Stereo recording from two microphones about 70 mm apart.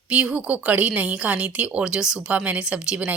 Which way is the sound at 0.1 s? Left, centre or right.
Centre.